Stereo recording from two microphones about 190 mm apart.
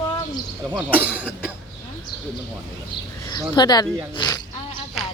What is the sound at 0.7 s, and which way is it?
Speech, 10° right (ahead or behind).